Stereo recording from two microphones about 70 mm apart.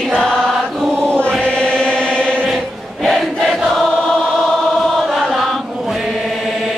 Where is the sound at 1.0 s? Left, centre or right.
Centre.